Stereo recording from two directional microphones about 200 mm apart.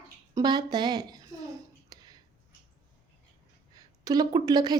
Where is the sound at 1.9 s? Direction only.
20° right (ahead or behind).